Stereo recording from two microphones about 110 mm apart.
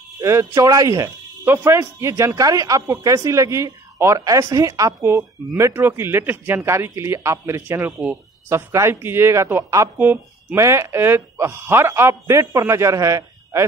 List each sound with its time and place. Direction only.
0.2 s speech: 25° right (ahead or behind)